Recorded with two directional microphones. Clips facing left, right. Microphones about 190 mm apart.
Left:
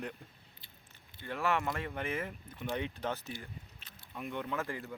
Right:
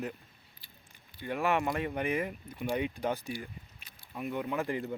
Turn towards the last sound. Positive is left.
turn(degrees=-20)  # may be behind; listen again after turning